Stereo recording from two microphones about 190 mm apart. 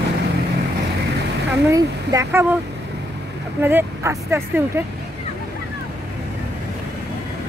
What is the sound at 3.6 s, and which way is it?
Speech, 10° right (ahead or behind).